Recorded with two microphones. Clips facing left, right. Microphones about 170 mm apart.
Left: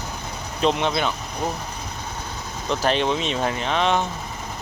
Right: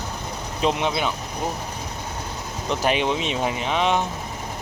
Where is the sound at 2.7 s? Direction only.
10° right (ahead or behind).